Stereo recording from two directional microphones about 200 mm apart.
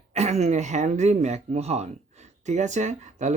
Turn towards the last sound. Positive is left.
turn(degrees=-35)  # may be behind; listen again after turning